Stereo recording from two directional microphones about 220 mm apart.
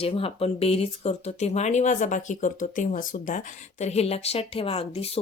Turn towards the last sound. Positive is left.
turn(degrees=25)  # may be behind; listen again after turning